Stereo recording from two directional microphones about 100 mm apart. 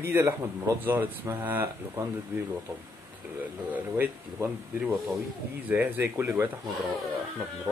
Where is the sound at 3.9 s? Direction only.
20° right (ahead or behind).